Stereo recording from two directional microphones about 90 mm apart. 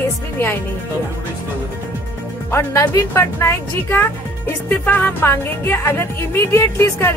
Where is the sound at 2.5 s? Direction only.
30° left (ahead or behind).